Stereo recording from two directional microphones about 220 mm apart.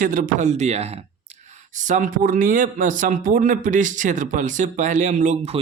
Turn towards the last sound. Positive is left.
turn(degrees=-30)  # may be behind; listen again after turning